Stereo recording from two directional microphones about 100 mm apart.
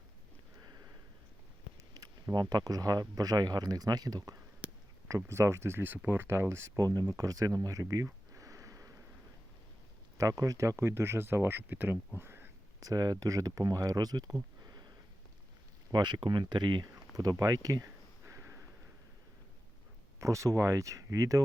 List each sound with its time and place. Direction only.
2.3 s speech: 45° right (ahead or behind)
4.6 s a sound: 15° right (ahead or behind)
5.0 s speech: 30° right (ahead or behind)
8.4 s sniff: 35° right (ahead or behind)
10.2 s speech: 35° right (ahead or behind)
12.8 s speech: 40° right (ahead or behind)
14.6 s sniff: 40° right (ahead or behind)
15.9 s speech: 50° right (ahead or behind)
17.4 s a sound: 35° right (ahead or behind)
20.1 s speech: 30° right (ahead or behind)